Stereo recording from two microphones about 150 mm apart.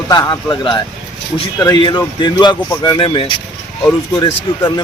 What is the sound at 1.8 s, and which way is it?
A man's voice, 30° left (ahead or behind).